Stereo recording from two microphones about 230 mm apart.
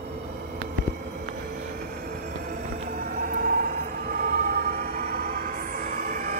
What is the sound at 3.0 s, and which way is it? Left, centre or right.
Train, right.